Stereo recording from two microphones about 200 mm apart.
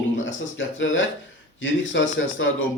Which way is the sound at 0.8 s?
70° left (ahead or behind).